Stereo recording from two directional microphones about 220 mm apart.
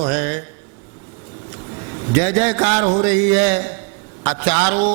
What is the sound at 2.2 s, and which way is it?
A man's voice, 15° right (ahead or behind).